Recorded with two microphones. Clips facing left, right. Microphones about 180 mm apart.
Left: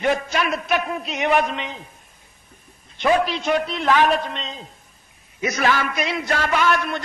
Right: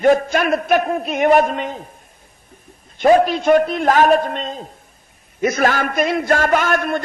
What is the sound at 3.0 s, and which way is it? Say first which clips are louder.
A man's voice: right 6 dB; 45° right (ahead or behind).